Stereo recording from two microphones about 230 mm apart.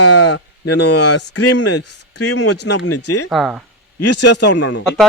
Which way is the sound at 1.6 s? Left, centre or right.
Left.